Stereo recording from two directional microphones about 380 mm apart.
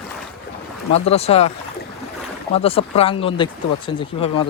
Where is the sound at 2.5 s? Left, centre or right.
Centre.